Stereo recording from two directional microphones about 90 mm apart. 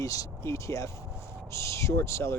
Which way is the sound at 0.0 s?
40° left (ahead or behind).